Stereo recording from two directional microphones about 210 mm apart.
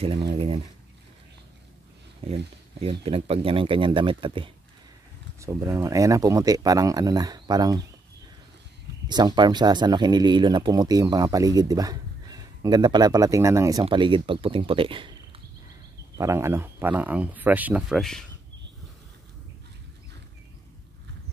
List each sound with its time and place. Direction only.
0.3 s speech: 25° right (ahead or behind)
2.2 s speech: 25° right (ahead or behind)
5.4 s speech: 15° right (ahead or behind)
9.1 s speech: 20° right (ahead or behind)
16.2 s speech: 15° right (ahead or behind)